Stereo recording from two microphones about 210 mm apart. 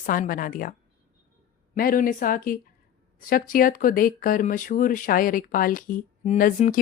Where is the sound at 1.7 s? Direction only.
40° left (ahead or behind).